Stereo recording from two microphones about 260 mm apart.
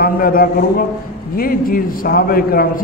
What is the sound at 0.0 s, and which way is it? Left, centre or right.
A man's voice, left.